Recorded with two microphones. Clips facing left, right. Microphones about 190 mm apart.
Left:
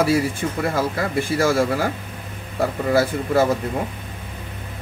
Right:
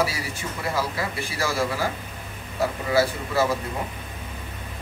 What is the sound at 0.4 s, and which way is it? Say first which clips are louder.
Speech: left 6 dB; 50° left (ahead or behind).